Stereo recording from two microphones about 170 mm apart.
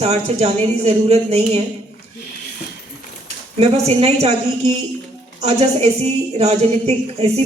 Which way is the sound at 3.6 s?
40° right (ahead or behind).